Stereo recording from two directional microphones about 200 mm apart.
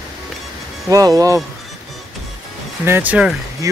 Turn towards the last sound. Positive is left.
turn(degrees=-5)  # may be behind; listen again after turning